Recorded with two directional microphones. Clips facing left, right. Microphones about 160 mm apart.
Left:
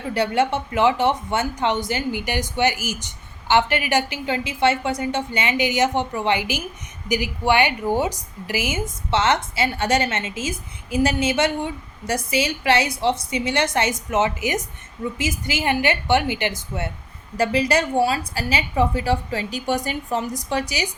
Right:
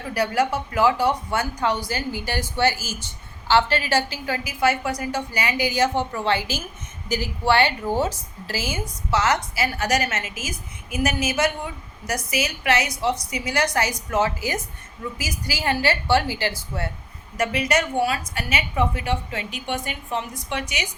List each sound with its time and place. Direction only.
0.1 s a woman's voice: 25° left (ahead or behind)
17.3 s a woman's voice: 30° left (ahead or behind)